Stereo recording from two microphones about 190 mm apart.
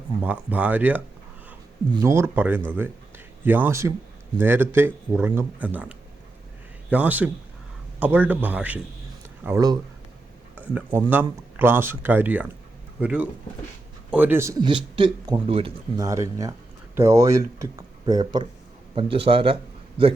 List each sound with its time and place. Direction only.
0.2 s speech: 10° right (ahead or behind)
6.9 s speech: 10° right (ahead or behind)
10.8 s a man's voice: 10° right (ahead or behind); by 16.0 s 30° right (ahead or behind)
16.0 s a man's voice: 15° right (ahead or behind)